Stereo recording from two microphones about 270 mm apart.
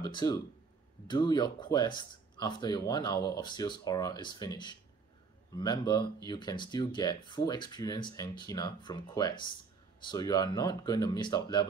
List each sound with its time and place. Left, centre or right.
0.0 s speech: centre